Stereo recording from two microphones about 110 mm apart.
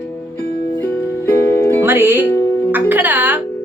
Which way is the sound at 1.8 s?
20° right (ahead or behind).